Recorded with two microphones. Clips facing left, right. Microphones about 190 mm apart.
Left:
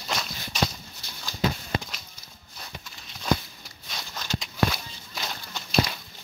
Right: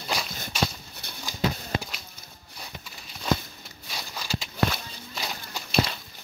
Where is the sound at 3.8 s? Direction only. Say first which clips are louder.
Even; 5° right (ahead or behind).